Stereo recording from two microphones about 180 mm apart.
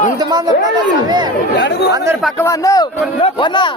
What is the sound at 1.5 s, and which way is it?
Speech, 70° left (ahead or behind).